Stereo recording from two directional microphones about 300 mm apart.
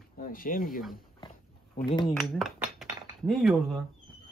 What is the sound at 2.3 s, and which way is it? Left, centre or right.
Dishes, centre.